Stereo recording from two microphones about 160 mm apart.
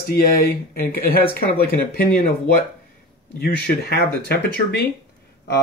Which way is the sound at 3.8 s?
85° left.